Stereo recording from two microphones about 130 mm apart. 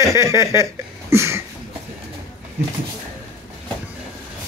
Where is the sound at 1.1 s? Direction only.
20° right (ahead or behind).